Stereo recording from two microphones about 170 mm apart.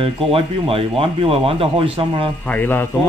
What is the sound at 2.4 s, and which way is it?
Speech, 10° left (ahead or behind).